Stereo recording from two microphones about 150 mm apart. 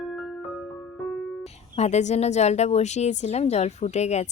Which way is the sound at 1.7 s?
45° left (ahead or behind).